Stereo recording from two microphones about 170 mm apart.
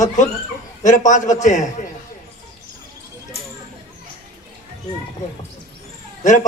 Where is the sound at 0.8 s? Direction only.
45° left (ahead or behind).